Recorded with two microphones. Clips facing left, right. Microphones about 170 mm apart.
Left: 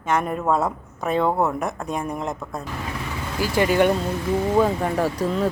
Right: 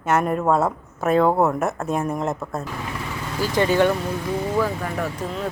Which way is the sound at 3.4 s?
10° left (ahead or behind).